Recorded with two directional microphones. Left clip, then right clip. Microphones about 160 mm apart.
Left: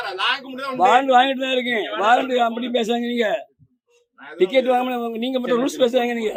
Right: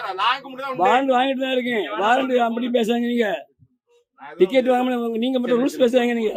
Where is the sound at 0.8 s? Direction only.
35° right (ahead or behind).